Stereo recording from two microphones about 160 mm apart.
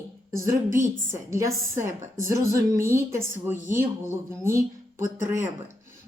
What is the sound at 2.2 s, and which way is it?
Speech, 15° right (ahead or behind).